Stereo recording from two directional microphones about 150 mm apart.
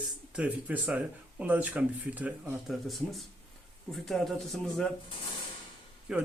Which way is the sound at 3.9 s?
Centre (ahead or behind).